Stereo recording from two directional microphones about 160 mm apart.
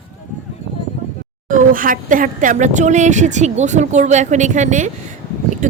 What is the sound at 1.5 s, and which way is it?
Speech, 60° right (ahead or behind).